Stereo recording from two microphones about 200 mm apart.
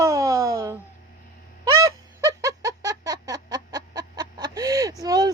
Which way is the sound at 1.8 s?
15° right (ahead or behind).